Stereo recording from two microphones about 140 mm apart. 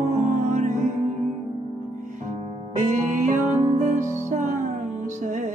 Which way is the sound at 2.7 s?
65° right (ahead or behind).